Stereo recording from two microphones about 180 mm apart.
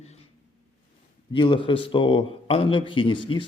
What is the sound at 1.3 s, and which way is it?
A man's voice, 25° left (ahead or behind).